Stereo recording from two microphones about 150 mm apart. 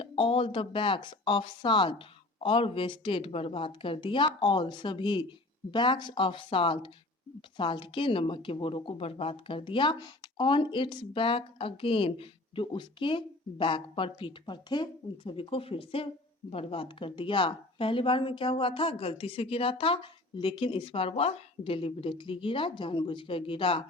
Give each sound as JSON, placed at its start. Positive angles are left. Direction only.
{"t": 0.0, "sound": "speech", "side_deg": 40}